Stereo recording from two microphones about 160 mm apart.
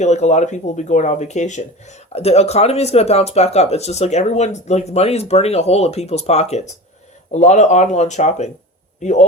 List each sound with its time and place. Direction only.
0.0 s a man's voice: 45° left (ahead or behind)